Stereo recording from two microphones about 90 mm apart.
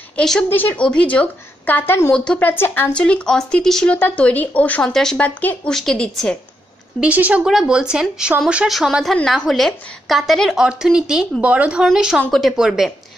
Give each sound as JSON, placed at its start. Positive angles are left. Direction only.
{"t": 0.2, "sound": "speech", "side_deg": 5}
{"t": 0.5, "sound": "a woman's voice", "side_deg": 20}
{"t": 2.1, "sound": "a woman's voice", "side_deg": 10}
{"t": 2.9, "sound": "speech", "side_deg": 10}
{"t": 5.7, "sound": "a woman's voice", "side_deg": 5}
{"t": 7.0, "sound": "a woman's voice", "side_deg": -15}
{"t": 11.8, "sound": "a woman's voice", "side_deg": -5}